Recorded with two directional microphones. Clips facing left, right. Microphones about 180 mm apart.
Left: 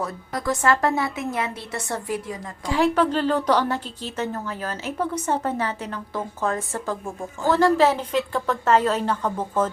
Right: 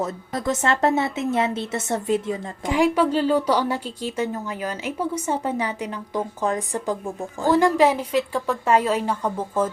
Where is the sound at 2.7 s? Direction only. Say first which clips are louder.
Right 1 dB; 10° right (ahead or behind).